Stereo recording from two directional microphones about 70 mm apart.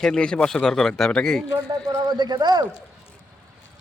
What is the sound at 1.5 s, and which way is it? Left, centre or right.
Speech, right.